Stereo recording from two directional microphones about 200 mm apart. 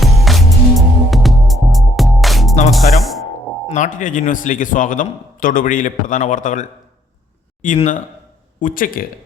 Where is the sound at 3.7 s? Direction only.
40° left (ahead or behind).